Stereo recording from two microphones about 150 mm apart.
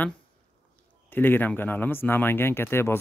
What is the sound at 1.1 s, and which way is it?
Speech, 15° left (ahead or behind).